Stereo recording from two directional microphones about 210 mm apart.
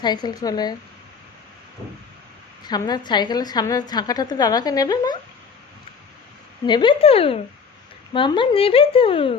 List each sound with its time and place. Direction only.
0.0 s a woman's voice: 20° left (ahead or behind)
2.6 s a woman's voice: 20° left (ahead or behind)
6.7 s a woman's voice: 20° left (ahead or behind)